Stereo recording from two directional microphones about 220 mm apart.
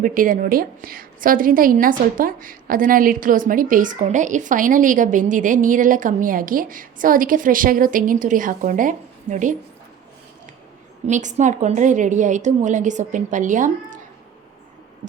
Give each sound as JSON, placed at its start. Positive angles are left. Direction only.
{"t": 0.0, "sound": "a woman's voice", "side_deg": -40}
{"t": 11.0, "sound": "a woman's voice", "side_deg": -35}